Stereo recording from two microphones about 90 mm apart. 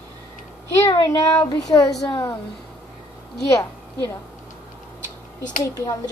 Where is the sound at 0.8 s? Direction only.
40° left (ahead or behind).